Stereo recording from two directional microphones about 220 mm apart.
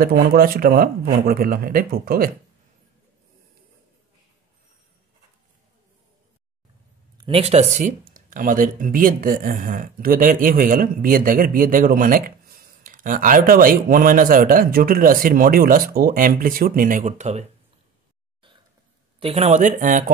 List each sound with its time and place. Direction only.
0.0 s speech: 40° right (ahead or behind)
7.2 s speech: 25° right (ahead or behind)
19.1 s speech: 25° right (ahead or behind)